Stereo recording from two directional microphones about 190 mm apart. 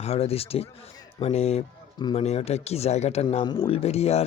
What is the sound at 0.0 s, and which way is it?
Speech, 30° left (ahead or behind).